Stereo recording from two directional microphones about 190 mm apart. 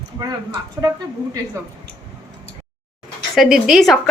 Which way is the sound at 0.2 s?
20° right (ahead or behind).